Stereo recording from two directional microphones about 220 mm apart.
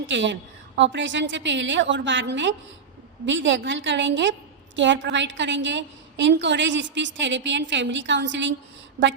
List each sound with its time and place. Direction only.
0.1 s a woman's voice: 55° right (ahead or behind)